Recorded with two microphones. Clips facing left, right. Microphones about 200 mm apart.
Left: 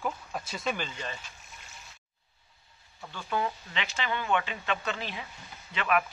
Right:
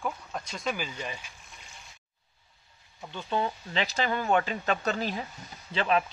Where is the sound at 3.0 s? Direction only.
20° right (ahead or behind); by 5.2 s 40° right (ahead or behind).